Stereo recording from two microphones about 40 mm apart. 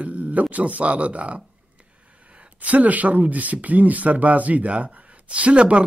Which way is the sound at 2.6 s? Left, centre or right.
Right.